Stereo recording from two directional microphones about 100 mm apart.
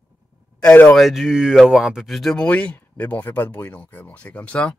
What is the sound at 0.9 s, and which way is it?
Speech, centre (ahead or behind).